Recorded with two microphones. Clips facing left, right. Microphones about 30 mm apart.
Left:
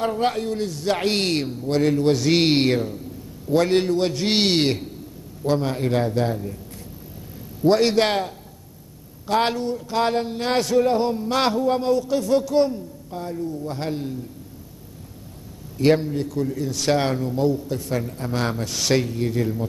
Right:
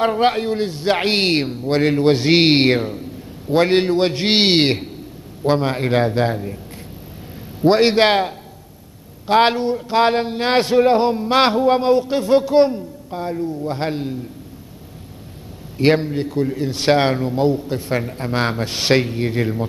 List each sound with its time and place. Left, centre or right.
0.0 s a man's voice: right
7.6 s a man's voice: right
15.8 s a man's voice: right